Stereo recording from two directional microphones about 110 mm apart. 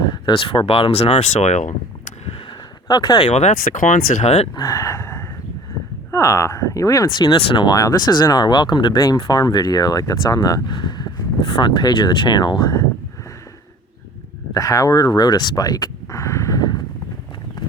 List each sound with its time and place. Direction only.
0.0 s speech: 45° left (ahead or behind); by 1.6 s 90° left
2.8 s speech: 40° left (ahead or behind)
3.2 s speech: 85° left
4.5 s a sound: 30° left (ahead or behind)
6.1 s speech: 25° left (ahead or behind)
7.3 s speech: 45° left (ahead or behind)
9.0 s speech: 30° left (ahead or behind)
11.4 s speech: 50° left (ahead or behind)
14.5 s speech: 30° left (ahead or behind)